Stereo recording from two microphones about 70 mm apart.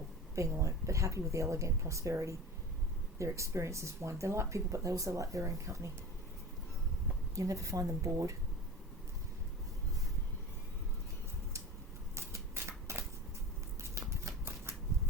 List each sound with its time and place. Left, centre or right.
0.3 s speech: right
7.3 s speech: right
12.1 s shuffling cards: right
14.1 s a sound: right